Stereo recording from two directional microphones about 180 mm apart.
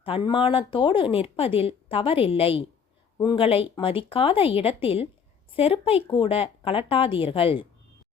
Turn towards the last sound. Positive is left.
turn(degrees=30)  # may be behind; listen again after turning